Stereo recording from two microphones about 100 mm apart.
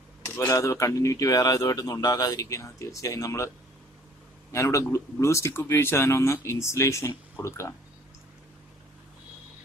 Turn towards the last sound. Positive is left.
turn(degrees=30)  # may be behind; listen again after turning